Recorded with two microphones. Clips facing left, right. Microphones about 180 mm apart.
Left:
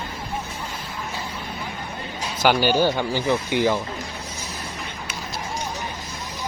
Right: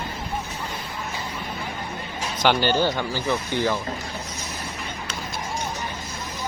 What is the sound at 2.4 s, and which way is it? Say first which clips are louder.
Speech: left 2 dB; 10° left (ahead or behind).